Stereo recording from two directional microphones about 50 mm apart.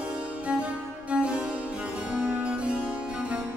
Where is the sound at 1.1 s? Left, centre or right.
Right.